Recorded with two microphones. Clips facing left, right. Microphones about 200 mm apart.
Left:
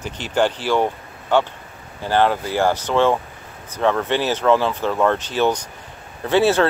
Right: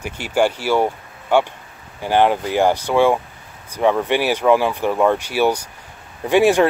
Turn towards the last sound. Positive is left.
turn(degrees=-15)  # may be behind; listen again after turning